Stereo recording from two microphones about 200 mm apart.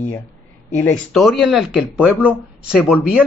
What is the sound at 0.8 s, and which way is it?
Speech, 10° left (ahead or behind).